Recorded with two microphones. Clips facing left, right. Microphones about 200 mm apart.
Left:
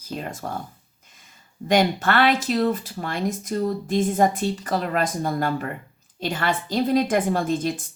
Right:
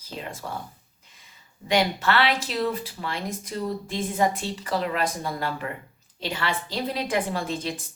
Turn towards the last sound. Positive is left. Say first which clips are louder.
# left 6 dB
turn(degrees=50)  # may be behind; listen again after turning